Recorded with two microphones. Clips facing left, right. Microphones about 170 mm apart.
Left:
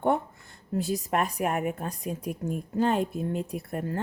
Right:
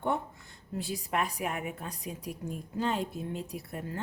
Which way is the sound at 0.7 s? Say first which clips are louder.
Left 6 dB; 45° left (ahead or behind).